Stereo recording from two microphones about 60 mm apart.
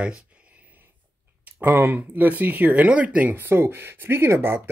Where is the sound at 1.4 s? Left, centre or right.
Right.